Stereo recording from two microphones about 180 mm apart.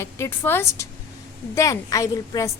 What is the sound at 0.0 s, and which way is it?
A woman's voice, 15° left (ahead or behind).